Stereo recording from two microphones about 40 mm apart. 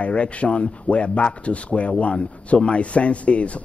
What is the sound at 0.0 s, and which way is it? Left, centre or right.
Speech, left.